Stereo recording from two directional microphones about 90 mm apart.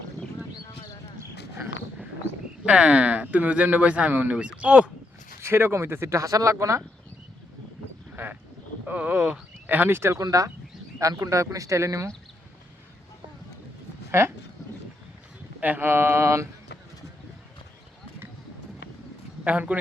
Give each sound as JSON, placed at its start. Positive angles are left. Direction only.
{"t": 2.6, "sound": "speech", "side_deg": -10}
{"t": 5.4, "sound": "speech", "side_deg": -25}
{"t": 8.1, "sound": "speech", "side_deg": -20}
{"t": 14.1, "sound": "speech", "side_deg": -30}
{"t": 15.6, "sound": "speech", "side_deg": -20}
{"t": 19.5, "sound": "speech", "side_deg": -15}